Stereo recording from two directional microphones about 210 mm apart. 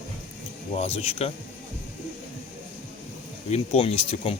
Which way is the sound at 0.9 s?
30° left (ahead or behind).